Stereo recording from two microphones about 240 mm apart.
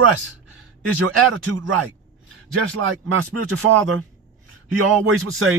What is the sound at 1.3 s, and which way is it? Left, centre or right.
Speech, right.